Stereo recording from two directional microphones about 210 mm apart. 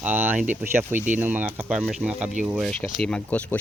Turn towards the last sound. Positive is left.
turn(degrees=5)  # may be behind; listen again after turning